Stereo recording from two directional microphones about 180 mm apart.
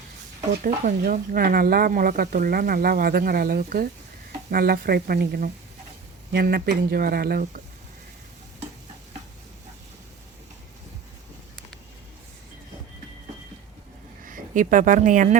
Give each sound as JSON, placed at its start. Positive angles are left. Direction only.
{"t": 0.5, "sound": "speech", "side_deg": -50}
{"t": 14.3, "sound": "a woman's voice", "side_deg": -45}